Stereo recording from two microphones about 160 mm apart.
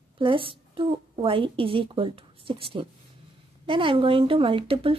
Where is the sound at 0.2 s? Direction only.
35° right (ahead or behind).